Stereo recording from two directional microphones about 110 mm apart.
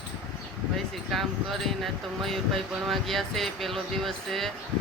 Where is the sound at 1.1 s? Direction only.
Centre (ahead or behind).